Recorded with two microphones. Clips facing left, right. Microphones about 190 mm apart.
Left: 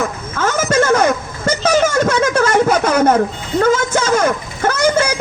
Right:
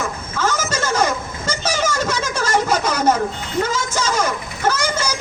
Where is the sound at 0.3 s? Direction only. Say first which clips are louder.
Left 7 dB; 55° left (ahead or behind).